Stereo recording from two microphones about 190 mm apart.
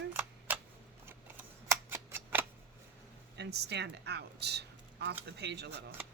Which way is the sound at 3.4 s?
60° right (ahead or behind).